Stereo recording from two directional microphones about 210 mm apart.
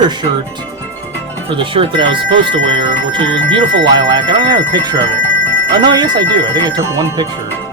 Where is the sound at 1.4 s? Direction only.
25° right (ahead or behind).